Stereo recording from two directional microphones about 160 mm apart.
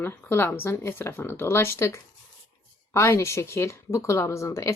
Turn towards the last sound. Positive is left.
turn(degrees=20)  # may be behind; listen again after turning